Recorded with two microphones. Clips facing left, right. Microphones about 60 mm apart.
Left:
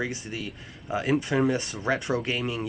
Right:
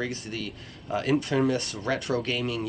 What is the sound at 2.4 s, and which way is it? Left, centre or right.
Speech, centre.